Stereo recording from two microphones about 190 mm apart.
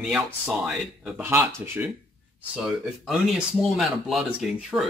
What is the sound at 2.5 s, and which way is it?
Speech, centre (ahead or behind).